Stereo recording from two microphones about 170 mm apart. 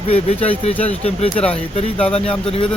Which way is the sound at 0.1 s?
35° left (ahead or behind).